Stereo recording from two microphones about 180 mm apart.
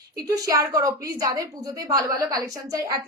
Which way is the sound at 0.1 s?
20° right (ahead or behind).